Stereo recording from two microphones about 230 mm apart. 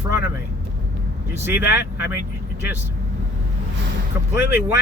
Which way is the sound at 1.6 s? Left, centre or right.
Left.